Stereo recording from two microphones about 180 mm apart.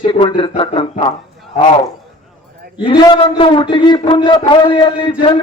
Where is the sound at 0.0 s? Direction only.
25° left (ahead or behind).